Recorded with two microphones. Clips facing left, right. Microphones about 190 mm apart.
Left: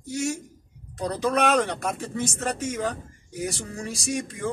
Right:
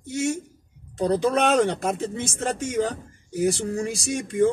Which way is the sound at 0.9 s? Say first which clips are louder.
Right 3 dB; 30° right (ahead or behind).